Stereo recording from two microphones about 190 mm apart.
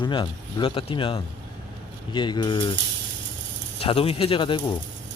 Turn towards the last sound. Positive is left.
turn(degrees=25)  # may be behind; listen again after turning